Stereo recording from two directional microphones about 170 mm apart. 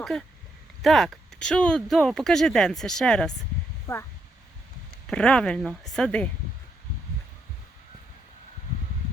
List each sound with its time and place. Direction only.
0.0 s speech: 5° left (ahead or behind)
3.9 s speech: 15° left (ahead or behind)
5.0 s speech: 5° left (ahead or behind)